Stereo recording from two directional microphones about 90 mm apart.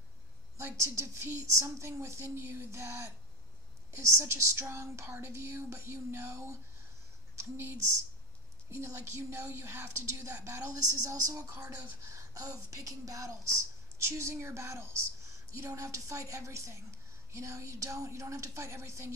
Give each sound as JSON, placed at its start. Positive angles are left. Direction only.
{"t": 0.6, "sound": "a woman's voice", "side_deg": -30}
{"t": 8.6, "sound": "a woman's voice", "side_deg": -30}